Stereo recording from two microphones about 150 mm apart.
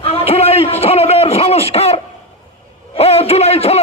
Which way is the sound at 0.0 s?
40° left (ahead or behind).